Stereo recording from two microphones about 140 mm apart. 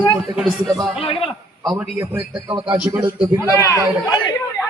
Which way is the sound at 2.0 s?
20° right (ahead or behind).